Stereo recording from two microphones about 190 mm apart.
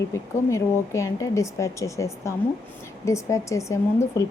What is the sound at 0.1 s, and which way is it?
A woman's voice, 15° left (ahead or behind).